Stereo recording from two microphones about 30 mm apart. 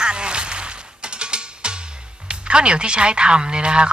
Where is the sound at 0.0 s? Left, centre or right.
Right.